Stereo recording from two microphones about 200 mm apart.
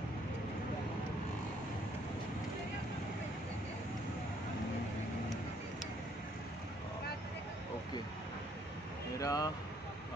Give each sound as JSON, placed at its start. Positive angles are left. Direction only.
{"t": 9.2, "sound": "speech", "side_deg": 20}